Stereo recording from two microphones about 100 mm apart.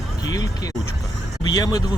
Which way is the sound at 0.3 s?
40° left (ahead or behind).